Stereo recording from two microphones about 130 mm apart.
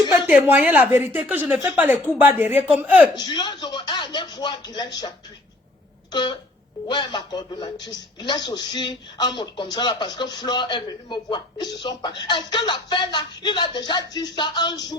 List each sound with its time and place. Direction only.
0.3 s a woman's voice: 10° right (ahead or behind)
3.2 s a man's voice: 35° left (ahead or behind)
6.1 s throat clearing: 35° left (ahead or behind)
6.8 s a man's voice: 35° left (ahead or behind)